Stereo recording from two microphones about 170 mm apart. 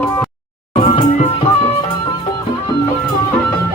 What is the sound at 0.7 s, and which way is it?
Music, 40° left (ahead or behind).